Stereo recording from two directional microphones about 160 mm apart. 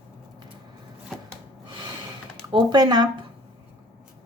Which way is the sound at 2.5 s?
25° right (ahead or behind).